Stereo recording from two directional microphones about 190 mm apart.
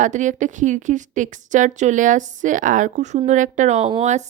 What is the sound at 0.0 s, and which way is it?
A woman's voice, 40° right (ahead or behind).